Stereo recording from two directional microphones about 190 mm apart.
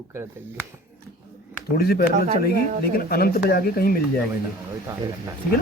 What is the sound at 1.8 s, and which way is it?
Speech, 55° left (ahead or behind).